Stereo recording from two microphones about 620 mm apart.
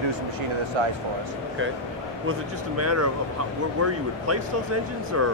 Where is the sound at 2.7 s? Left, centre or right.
Right.